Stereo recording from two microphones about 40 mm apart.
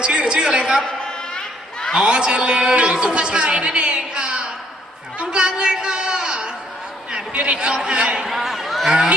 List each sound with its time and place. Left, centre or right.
0.0 s a man's voice: right
0.9 s chatter: left
1.9 s a man's voice: right
8.4 s cattle: centre